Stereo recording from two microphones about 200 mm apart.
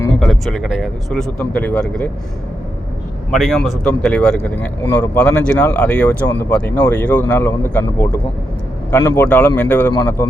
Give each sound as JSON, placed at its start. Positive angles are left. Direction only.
{"t": 0.0, "sound": "speech", "side_deg": 5}
{"t": 3.3, "sound": "speech", "side_deg": 0}